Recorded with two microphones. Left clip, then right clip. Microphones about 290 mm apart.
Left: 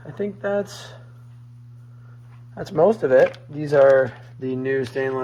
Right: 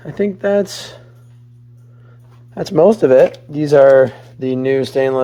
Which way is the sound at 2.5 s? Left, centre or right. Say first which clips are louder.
Right 7 dB; right.